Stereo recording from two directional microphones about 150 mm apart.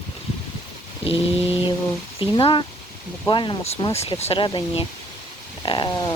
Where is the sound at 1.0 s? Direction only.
40° left (ahead or behind).